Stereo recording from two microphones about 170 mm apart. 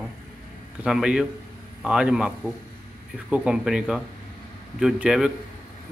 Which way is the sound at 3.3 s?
5° right (ahead or behind).